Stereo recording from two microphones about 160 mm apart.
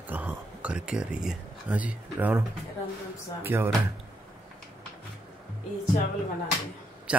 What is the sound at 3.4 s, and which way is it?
Speech, 15° right (ahead or behind).